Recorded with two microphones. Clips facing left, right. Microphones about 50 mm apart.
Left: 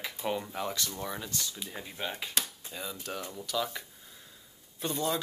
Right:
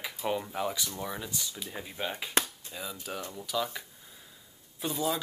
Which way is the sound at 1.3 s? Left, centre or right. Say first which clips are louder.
Left 1 dB; centre.